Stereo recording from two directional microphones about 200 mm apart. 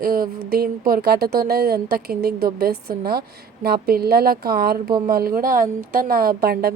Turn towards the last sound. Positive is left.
turn(degrees=-50)  # may be behind; listen again after turning